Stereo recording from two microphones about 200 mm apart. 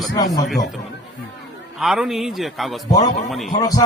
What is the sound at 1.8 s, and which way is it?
A man's voice, 5° right (ahead or behind).